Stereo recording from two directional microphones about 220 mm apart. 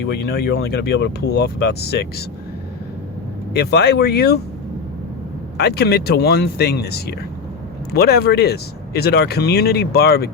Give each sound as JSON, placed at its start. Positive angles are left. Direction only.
{"t": 0.0, "sound": "speech", "side_deg": 45}
{"t": 3.5, "sound": "speech", "side_deg": 45}
{"t": 5.5, "sound": "speech", "side_deg": 45}